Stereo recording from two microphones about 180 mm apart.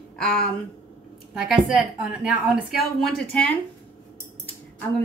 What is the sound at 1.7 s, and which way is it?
A woman's voice, 5° right (ahead or behind).